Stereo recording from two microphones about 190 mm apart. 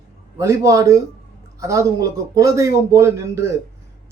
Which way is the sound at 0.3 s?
15° right (ahead or behind).